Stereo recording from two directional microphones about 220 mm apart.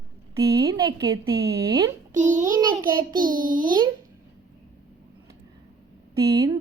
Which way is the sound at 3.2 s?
20° right (ahead or behind).